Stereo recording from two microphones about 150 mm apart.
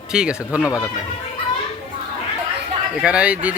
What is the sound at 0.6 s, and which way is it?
Speech, 20° left (ahead or behind).